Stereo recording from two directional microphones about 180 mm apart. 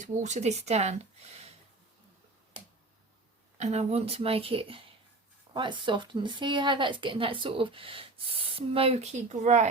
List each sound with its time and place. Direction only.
0.0 s speech: 40° right (ahead or behind)
3.6 s speech: 35° right (ahead or behind)